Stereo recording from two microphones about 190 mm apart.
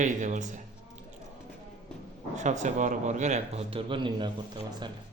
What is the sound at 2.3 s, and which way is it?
A man's voice, 40° right (ahead or behind).